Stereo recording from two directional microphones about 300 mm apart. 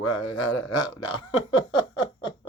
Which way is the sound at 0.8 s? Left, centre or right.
Centre.